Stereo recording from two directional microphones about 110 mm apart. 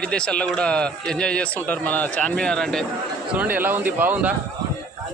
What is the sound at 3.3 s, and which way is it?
A man's voice, 15° right (ahead or behind).